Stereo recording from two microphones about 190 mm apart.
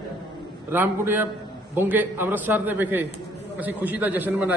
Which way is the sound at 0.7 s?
10° right (ahead or behind).